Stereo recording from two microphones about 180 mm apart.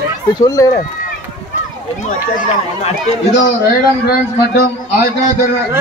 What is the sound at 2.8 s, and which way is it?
Speech, 40° left (ahead or behind).